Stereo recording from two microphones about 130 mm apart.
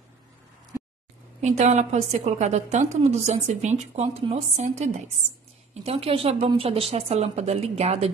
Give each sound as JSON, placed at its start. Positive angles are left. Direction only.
{"t": 1.4, "sound": "a woman's voice", "side_deg": -60}
{"t": 5.9, "sound": "a woman's voice", "side_deg": -45}